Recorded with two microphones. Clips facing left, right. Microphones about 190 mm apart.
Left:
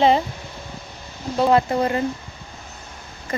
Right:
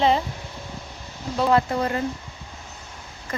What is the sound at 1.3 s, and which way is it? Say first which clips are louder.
Speech: left 3 dB; 20° left (ahead or behind).